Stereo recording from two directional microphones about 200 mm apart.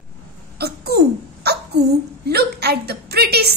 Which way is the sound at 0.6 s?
55° right (ahead or behind).